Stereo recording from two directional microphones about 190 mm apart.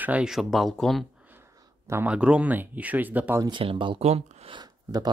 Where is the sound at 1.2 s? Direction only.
10° right (ahead or behind).